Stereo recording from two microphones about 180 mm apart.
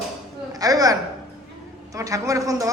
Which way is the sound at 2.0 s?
20° right (ahead or behind).